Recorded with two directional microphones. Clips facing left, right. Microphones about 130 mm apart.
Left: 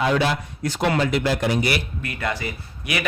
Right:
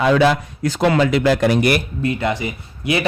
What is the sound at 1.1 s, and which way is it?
Speech, 90° right.